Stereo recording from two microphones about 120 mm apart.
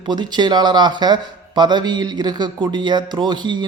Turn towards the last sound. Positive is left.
turn(degrees=-40)  # may be behind; listen again after turning